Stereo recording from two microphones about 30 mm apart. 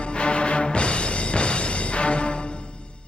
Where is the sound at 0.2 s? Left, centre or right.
Left.